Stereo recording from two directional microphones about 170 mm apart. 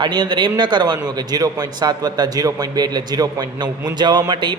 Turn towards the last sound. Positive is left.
turn(degrees=-25)  # may be behind; listen again after turning